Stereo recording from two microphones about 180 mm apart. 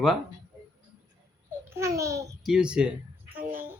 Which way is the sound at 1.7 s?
15° right (ahead or behind).